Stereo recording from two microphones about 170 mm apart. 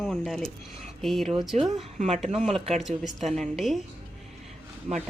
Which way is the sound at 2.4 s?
Centre (ahead or behind).